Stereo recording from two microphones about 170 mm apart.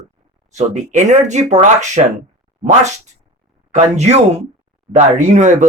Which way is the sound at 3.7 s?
40° right (ahead or behind).